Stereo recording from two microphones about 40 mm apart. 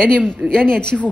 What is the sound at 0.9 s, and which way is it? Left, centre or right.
Speech, centre.